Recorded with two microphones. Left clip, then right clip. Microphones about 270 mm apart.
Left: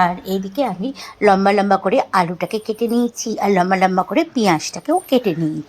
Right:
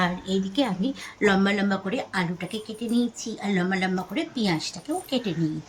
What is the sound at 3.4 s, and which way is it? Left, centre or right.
Speech, left.